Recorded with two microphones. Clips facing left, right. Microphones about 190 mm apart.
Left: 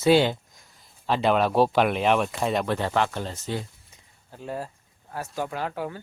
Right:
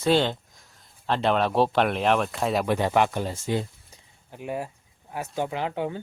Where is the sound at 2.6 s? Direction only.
15° right (ahead or behind).